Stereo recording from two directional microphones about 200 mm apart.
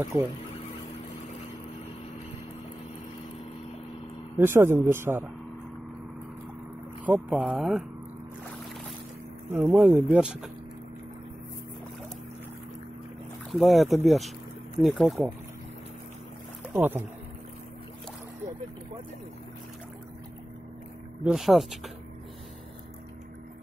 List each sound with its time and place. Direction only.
4.4 s speech: 10° right (ahead or behind)
7.1 s speech: 5° right (ahead or behind)
9.5 s speech: 5° right (ahead or behind)
13.5 s speech: centre (ahead or behind)
16.7 s speech: 10° right (ahead or behind)
21.2 s speech: 5° right (ahead or behind)